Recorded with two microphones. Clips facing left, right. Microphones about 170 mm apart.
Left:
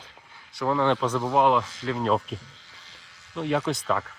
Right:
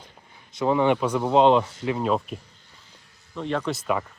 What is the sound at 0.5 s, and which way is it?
Speech, 20° right (ahead or behind).